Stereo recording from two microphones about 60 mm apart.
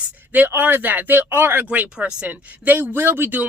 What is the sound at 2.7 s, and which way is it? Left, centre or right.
Speech, right.